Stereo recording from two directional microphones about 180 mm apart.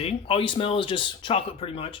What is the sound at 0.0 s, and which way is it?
Speech, 30° left (ahead or behind).